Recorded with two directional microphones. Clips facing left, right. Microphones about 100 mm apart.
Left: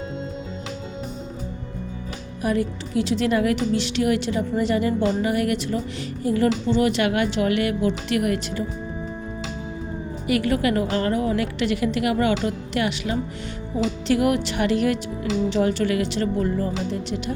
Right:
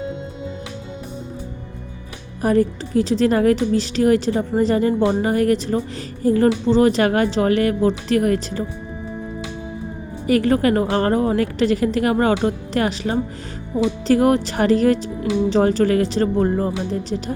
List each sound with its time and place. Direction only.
2.4 s speech: 40° right (ahead or behind)
10.2 s speech: 35° right (ahead or behind)